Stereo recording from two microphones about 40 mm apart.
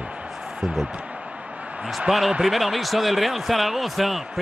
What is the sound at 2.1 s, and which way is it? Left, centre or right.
Speech, centre.